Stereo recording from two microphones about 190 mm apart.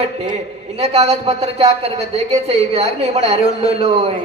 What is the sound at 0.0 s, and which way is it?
A woman's voice, 35° right (ahead or behind).